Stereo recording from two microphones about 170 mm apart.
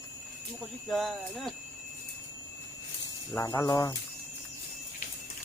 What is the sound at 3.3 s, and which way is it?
Speech, 20° left (ahead or behind).